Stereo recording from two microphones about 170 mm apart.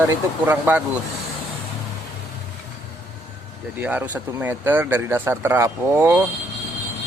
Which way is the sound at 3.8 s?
10° right (ahead or behind).